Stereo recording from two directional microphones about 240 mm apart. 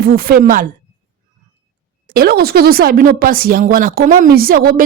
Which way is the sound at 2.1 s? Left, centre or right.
Right.